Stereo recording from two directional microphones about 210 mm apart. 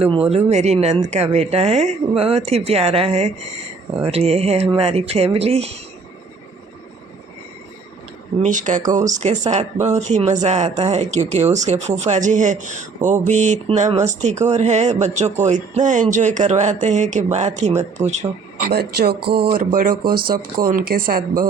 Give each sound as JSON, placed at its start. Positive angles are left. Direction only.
{"t": 0.0, "sound": "speech", "side_deg": -25}
{"t": 8.4, "sound": "speech", "side_deg": -35}
{"t": 18.7, "sound": "speech", "side_deg": -50}